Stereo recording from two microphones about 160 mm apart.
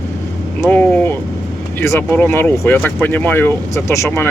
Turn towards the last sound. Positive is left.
turn(degrees=15)  # may be behind; listen again after turning